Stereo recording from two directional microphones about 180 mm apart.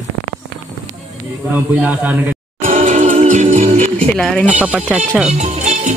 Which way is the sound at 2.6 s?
45° right (ahead or behind).